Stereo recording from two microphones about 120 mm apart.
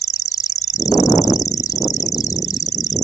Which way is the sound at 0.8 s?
30° left (ahead or behind).